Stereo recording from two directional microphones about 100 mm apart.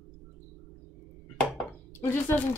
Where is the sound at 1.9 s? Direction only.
25° left (ahead or behind).